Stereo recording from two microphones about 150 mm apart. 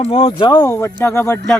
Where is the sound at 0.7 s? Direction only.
15° left (ahead or behind).